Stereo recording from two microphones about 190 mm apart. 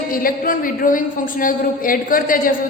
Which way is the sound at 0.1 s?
50° left (ahead or behind).